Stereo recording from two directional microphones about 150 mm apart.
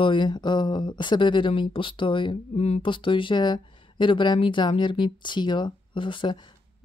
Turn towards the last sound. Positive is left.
turn(degrees=35)  # may be behind; listen again after turning